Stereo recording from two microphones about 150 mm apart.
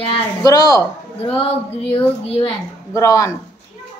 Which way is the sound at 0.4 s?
25° left (ahead or behind).